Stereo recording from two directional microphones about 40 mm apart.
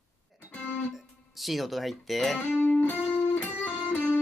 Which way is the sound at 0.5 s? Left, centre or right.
Left.